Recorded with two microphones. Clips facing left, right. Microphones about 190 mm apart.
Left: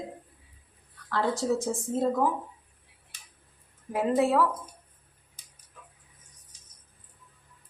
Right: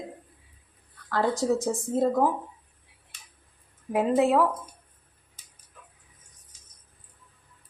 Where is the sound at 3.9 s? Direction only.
20° right (ahead or behind).